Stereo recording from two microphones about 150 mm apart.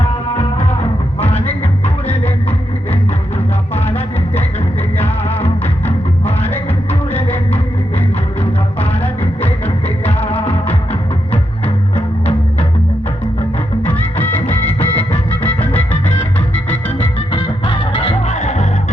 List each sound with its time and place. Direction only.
0.3 s music: 40° left (ahead or behind)
5.8 s music: 15° left (ahead or behind)
7.1 s a sound: 15° left (ahead or behind)
10.2 s music: 40° left (ahead or behind)
13.8 s music: 10° left (ahead or behind)
14.8 s music: 40° left (ahead or behind)
15.4 s music: 10° left (ahead or behind)
17.3 s music: 35° left (ahead or behind)